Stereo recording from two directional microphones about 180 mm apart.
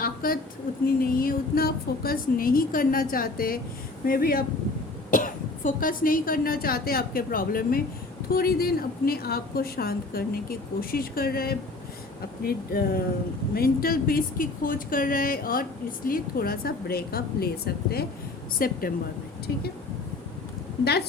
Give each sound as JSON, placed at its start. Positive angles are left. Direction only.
{"t": 0.0, "sound": "a sound", "side_deg": 55}
{"t": 0.9, "sound": "a woman's voice", "side_deg": 55}
{"t": 20.8, "sound": "a woman's voice", "side_deg": 65}